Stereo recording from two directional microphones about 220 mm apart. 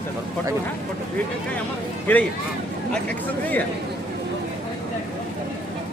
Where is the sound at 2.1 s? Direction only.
10° left (ahead or behind).